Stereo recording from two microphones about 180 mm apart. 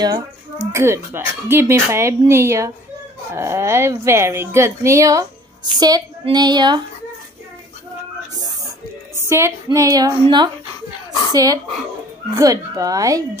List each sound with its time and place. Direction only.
0.7 s a woman's voice: 15° right (ahead or behind)
9.1 s a woman's voice: 15° right (ahead or behind)